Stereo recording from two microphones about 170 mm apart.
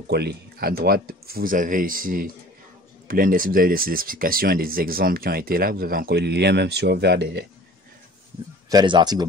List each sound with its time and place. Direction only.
0.1 s speech: 75° right (ahead or behind)
8.6 s speech: 25° right (ahead or behind)